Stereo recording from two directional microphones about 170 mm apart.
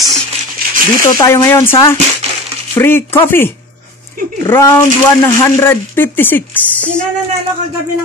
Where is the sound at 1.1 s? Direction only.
20° left (ahead or behind).